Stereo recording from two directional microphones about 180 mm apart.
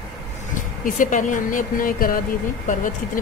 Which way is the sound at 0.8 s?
45° left (ahead or behind).